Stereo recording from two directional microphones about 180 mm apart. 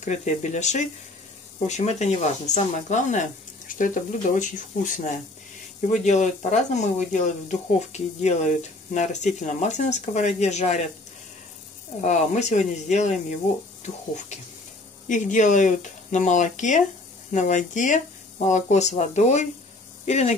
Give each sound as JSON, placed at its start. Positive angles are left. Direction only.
{"t": 0.0, "sound": "speech", "side_deg": 40}
{"t": 12.0, "sound": "speech", "side_deg": 40}